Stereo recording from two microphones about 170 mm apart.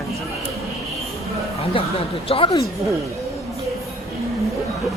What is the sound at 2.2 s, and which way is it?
Speech, 30° left (ahead or behind).